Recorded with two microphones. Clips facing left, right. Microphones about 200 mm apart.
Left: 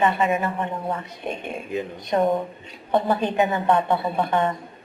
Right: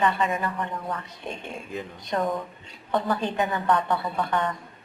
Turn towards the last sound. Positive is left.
turn(degrees=25)  # may be behind; listen again after turning